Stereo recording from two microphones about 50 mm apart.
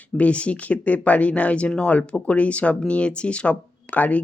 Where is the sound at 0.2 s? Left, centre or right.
Left.